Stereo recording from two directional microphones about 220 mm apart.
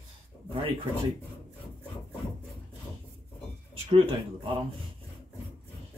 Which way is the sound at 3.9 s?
25° right (ahead or behind).